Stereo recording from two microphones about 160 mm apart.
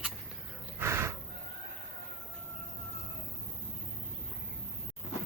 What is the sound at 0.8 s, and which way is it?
Gasp, 15° right (ahead or behind).